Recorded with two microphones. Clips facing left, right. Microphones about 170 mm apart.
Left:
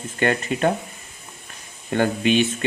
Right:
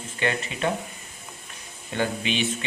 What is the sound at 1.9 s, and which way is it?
Speech, 50° left (ahead or behind).